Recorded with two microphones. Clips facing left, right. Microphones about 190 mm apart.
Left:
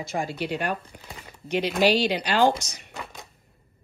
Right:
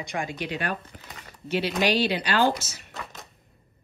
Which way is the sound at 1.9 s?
10° left (ahead or behind).